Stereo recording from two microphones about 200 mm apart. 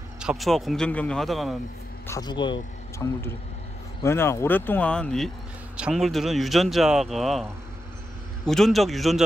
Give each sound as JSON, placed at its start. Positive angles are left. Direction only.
{"t": 0.2, "sound": "speech", "side_deg": 0}
{"t": 2.0, "sound": "speech", "side_deg": 20}
{"t": 4.0, "sound": "speech", "side_deg": 15}
{"t": 8.5, "sound": "speech", "side_deg": 0}